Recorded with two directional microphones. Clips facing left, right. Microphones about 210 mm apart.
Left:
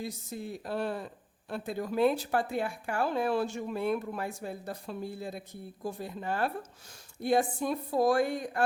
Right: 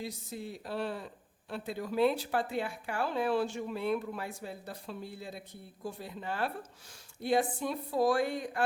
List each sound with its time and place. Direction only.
0.0 s speech: 45° left (ahead or behind)